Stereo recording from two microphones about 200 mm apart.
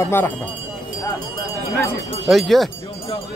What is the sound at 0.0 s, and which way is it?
Speech, 10° left (ahead or behind).